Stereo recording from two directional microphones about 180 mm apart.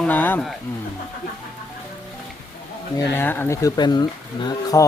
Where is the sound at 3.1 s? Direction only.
10° left (ahead or behind).